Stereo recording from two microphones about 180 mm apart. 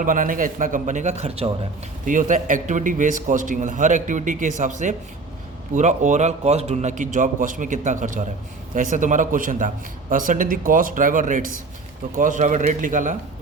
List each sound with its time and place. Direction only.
0.0 s a man's voice: 50° right (ahead or behind)